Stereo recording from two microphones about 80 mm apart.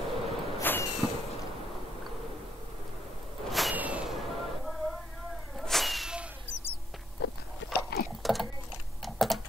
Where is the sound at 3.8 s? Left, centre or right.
Centre.